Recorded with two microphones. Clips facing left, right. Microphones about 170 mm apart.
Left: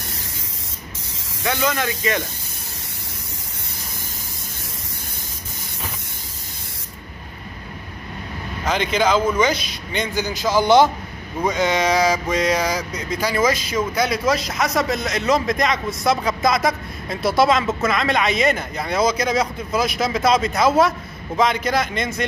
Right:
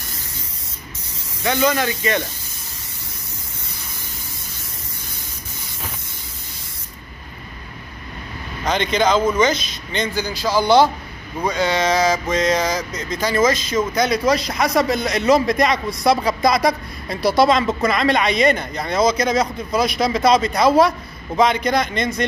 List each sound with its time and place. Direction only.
1.4 s speech: centre (ahead or behind)
8.6 s speech: 5° left (ahead or behind)